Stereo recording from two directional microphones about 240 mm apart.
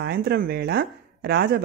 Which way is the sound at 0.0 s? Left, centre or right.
Right.